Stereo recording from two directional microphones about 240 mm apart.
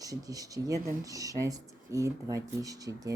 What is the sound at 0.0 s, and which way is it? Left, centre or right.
Speech, centre.